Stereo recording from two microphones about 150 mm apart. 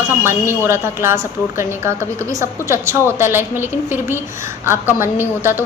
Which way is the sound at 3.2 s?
15° right (ahead or behind).